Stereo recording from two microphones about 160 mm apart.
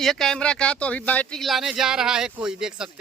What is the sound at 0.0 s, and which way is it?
Speech, centre (ahead or behind).